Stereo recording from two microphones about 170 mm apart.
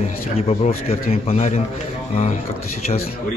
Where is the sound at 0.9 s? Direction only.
35° left (ahead or behind).